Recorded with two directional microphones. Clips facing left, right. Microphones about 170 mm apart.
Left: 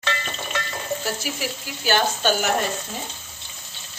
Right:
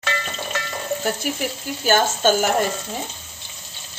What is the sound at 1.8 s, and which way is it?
Speech, 45° right (ahead or behind).